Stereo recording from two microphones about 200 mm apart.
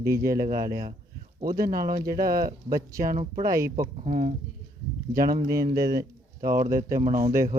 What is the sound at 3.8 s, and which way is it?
Speech, 40° right (ahead or behind).